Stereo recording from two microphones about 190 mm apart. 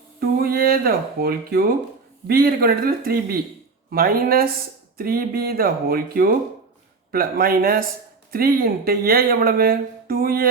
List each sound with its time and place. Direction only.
0.2 s speech: 50° right (ahead or behind)